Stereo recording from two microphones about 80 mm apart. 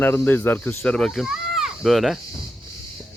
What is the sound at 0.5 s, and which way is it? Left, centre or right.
Speech, centre.